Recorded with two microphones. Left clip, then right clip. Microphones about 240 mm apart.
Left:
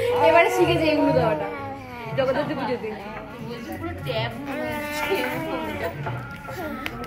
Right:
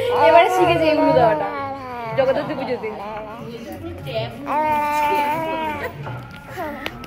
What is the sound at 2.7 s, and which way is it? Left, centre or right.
Speech, centre.